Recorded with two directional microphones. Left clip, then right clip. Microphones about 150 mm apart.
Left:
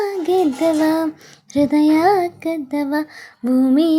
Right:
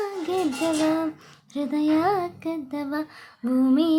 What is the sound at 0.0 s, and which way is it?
Child singing, 30° left (ahead or behind).